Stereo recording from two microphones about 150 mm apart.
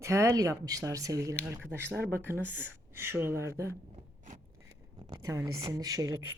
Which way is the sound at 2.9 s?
15° right (ahead or behind).